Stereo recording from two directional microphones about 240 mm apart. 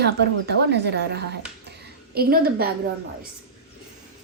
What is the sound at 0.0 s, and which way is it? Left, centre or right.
Speech, right.